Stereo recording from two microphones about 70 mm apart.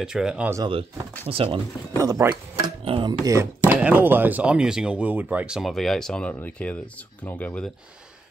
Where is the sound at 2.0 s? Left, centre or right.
Right.